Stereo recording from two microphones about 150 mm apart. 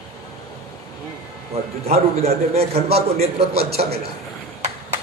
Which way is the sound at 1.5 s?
45° right (ahead or behind).